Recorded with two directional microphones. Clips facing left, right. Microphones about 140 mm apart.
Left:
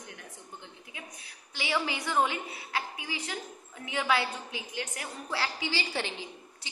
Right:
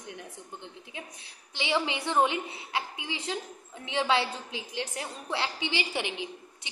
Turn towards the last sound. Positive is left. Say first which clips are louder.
# right 2 dB
turn(degrees=-15)  # may be behind; listen again after turning